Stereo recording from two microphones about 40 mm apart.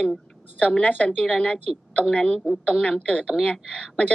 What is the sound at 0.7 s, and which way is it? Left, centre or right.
Speech, left.